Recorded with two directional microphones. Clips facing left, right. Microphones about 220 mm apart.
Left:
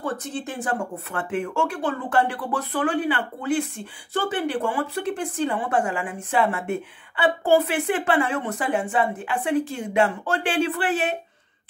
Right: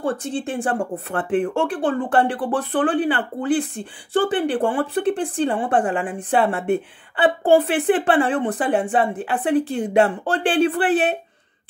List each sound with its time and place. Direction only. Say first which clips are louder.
0.0 s speech: right 5 dB; 30° right (ahead or behind)